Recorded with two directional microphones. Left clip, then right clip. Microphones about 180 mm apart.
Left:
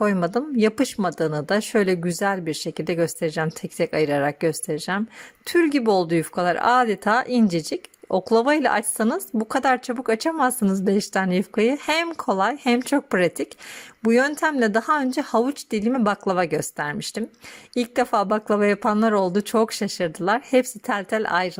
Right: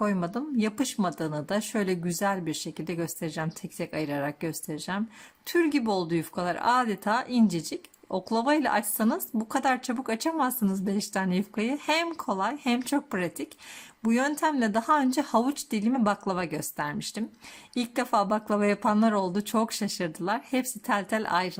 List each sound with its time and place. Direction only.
0.0 s speech: 30° left (ahead or behind)